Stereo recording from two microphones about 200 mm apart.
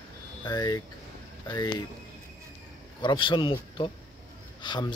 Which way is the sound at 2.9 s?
25° left (ahead or behind).